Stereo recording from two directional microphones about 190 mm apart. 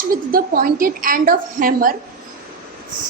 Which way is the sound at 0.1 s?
50° right (ahead or behind).